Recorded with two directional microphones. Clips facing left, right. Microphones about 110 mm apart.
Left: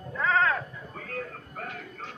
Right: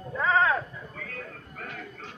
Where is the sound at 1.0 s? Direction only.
40° left (ahead or behind).